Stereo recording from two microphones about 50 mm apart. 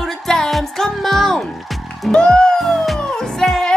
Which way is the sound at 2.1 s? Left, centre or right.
Centre.